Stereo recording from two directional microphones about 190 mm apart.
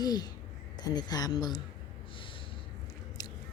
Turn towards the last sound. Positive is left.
turn(degrees=20)  # may be behind; listen again after turning